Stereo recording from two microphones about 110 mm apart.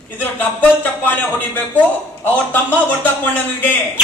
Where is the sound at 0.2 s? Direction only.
20° left (ahead or behind).